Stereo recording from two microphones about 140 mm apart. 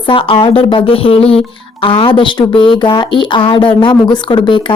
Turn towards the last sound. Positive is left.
turn(degrees=35)  # may be behind; listen again after turning